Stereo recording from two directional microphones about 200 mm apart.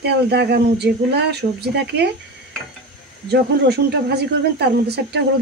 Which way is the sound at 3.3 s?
55° right (ahead or behind).